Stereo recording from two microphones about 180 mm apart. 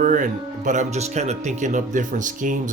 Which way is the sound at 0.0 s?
45° right (ahead or behind).